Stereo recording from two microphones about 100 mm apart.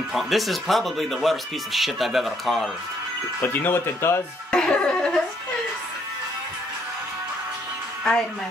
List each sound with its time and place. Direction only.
0.1 s speech: centre (ahead or behind)
3.3 s speech: 20° left (ahead or behind)
4.5 s music: 10° left (ahead or behind)